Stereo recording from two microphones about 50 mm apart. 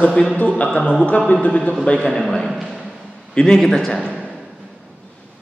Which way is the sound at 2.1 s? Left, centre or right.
Centre.